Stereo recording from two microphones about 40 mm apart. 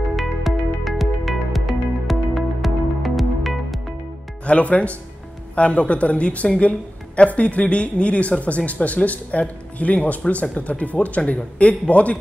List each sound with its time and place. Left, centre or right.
0.1 s music: centre
4.5 s speech: left